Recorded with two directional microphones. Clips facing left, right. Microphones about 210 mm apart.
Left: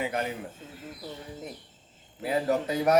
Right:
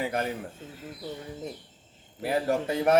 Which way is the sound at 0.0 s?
35° right (ahead or behind).